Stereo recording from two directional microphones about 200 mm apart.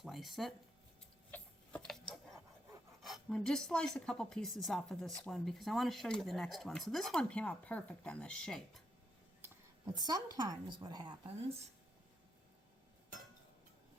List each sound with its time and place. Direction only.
0.0 s a sound: centre (ahead or behind)
3.0 s speech: centre (ahead or behind)
9.4 s a woman's voice: 20° right (ahead or behind)